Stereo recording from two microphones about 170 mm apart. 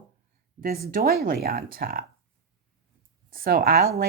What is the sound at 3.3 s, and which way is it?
Speech, 60° right (ahead or behind).